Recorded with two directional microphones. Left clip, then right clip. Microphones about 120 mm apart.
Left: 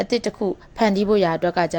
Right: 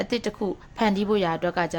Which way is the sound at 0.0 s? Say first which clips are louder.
Left 5 dB; 30° left (ahead or behind).